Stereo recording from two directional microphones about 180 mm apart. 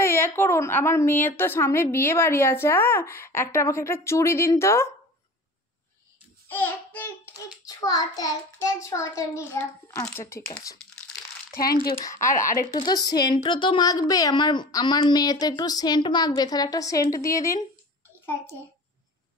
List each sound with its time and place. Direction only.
0.0 s a woman's voice: 15° left (ahead or behind)
6.5 s a woman's voice: 10° left (ahead or behind)
11.5 s speech: 60° left (ahead or behind)
11.9 s a woman's voice: 20° left (ahead or behind)
12.3 s speech: 45° left (ahead or behind)
12.5 s a woman's voice: 20° left (ahead or behind)